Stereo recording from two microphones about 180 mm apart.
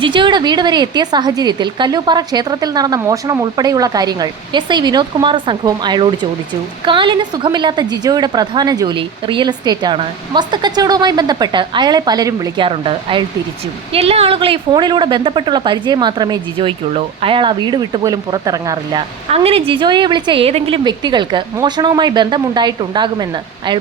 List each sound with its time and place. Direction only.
0.0 s a woman's voice: 25° right (ahead or behind)
19.3 s a woman's voice: 30° right (ahead or behind)